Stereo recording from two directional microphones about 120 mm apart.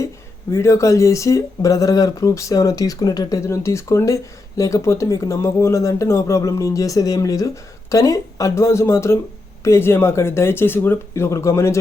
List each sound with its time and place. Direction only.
0.5 s speech: 25° left (ahead or behind)